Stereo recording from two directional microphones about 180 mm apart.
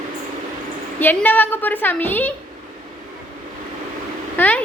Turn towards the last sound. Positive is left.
turn(degrees=10)  # may be behind; listen again after turning